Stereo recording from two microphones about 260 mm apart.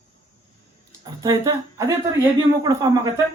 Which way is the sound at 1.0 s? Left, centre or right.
Centre.